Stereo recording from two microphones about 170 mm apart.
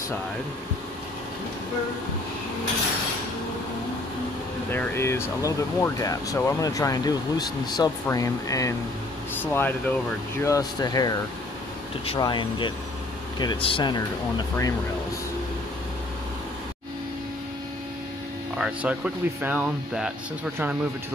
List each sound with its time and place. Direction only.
4.6 s speech: 15° left (ahead or behind)
12.2 s speech: 25° left (ahead or behind)
18.6 s speech: 5° right (ahead or behind)